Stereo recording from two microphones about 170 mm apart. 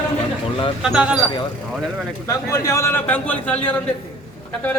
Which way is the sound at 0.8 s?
5° right (ahead or behind).